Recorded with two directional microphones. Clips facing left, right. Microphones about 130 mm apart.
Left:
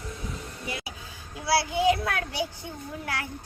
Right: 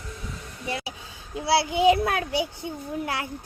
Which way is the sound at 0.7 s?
30° right (ahead or behind).